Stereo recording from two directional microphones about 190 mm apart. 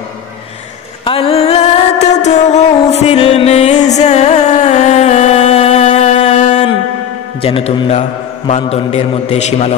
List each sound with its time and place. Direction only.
1.0 s music: 30° left (ahead or behind)
7.4 s a man's voice: 30° left (ahead or behind)